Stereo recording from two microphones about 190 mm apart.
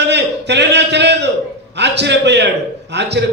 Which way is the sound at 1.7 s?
65° right (ahead or behind).